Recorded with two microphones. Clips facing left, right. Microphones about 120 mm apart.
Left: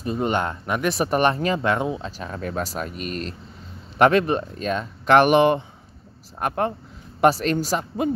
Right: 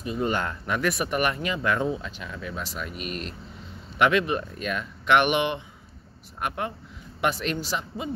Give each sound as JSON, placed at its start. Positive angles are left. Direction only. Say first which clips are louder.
{"t": 0.2, "sound": "speech", "louder": "left 2 dB", "side_deg": 25}
{"t": 2.0, "sound": "speech", "louder": "left 5 dB", "side_deg": 35}